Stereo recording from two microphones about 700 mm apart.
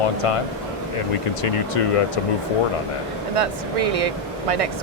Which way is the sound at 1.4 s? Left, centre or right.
Left.